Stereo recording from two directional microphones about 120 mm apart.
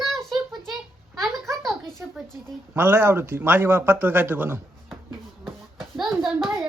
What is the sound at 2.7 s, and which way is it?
A man's voice, 20° right (ahead or behind).